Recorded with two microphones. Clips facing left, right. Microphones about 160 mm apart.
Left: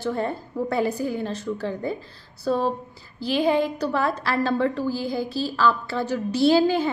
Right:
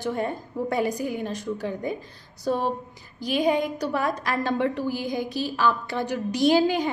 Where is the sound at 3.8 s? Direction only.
15° right (ahead or behind).